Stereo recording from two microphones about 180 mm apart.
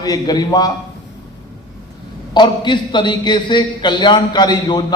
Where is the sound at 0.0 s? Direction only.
20° left (ahead or behind).